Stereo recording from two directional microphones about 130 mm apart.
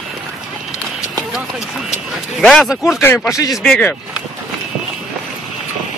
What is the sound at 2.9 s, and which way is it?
Speech, 20° left (ahead or behind).